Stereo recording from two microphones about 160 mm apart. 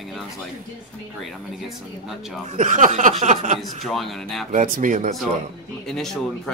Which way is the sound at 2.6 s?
50° right (ahead or behind).